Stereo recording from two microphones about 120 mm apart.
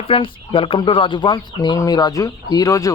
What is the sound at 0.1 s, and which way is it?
Speech, 50° left (ahead or behind).